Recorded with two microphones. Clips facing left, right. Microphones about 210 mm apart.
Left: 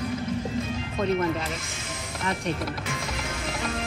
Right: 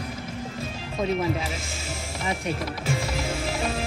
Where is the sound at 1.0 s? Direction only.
5° right (ahead or behind).